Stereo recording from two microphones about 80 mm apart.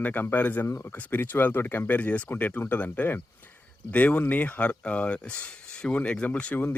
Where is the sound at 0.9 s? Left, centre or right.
Left.